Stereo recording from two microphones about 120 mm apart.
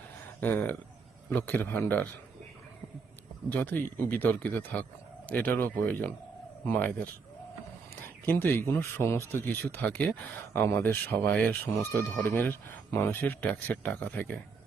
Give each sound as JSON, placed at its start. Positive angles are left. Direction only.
{"t": 0.3, "sound": "speech", "side_deg": 15}
{"t": 3.5, "sound": "speech", "side_deg": 15}